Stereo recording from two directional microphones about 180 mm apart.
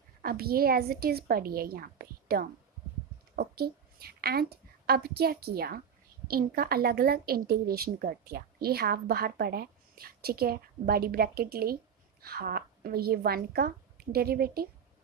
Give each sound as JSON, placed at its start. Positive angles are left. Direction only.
{"t": 0.2, "sound": "a woman's voice", "side_deg": -55}